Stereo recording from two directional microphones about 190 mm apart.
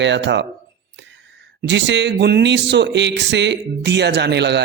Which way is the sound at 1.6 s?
65° right (ahead or behind).